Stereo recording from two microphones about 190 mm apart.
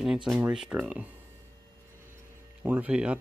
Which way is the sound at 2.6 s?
10° right (ahead or behind).